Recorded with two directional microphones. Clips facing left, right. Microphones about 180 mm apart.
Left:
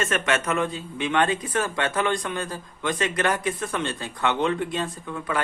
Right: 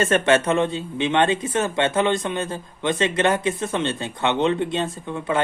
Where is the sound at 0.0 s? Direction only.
30° right (ahead or behind).